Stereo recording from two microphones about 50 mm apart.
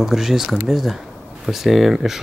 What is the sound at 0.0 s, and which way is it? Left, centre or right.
Speech, centre.